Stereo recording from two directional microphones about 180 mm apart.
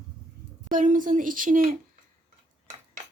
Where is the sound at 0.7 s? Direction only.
45° right (ahead or behind).